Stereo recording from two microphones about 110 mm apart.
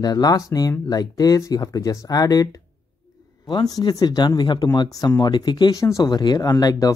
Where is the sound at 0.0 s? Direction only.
35° left (ahead or behind).